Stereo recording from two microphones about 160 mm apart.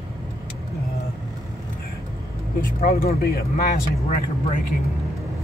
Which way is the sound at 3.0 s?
70° left (ahead or behind).